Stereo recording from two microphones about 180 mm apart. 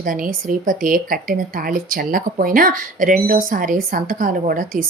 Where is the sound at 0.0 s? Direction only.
50° right (ahead or behind).